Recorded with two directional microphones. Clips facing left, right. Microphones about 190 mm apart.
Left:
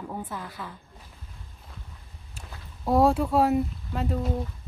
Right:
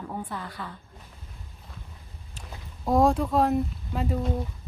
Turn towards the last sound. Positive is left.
turn(degrees=0)  # may be behind; listen again after turning